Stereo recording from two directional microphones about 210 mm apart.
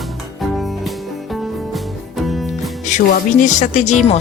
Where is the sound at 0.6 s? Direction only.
Centre (ahead or behind).